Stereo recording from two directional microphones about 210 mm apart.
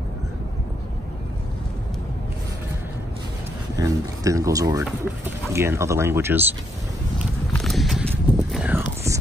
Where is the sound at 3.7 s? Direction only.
15° right (ahead or behind).